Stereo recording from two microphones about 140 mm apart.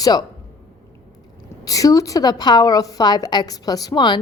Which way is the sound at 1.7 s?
25° left (ahead or behind).